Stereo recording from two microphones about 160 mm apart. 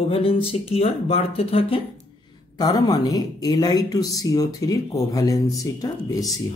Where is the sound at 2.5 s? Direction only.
25° left (ahead or behind).